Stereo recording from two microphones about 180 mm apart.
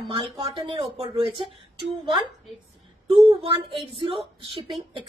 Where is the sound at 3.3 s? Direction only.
30° right (ahead or behind).